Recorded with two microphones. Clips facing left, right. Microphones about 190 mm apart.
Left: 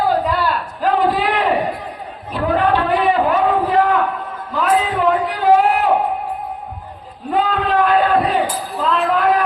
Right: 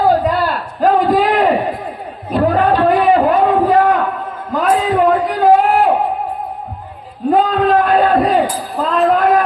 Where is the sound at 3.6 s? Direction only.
40° right (ahead or behind).